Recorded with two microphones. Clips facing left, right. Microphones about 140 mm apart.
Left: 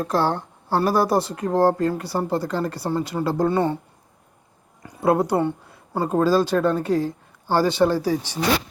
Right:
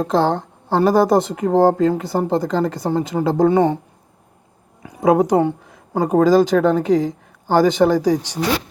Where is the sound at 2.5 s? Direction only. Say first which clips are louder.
Right 6 dB; 90° right.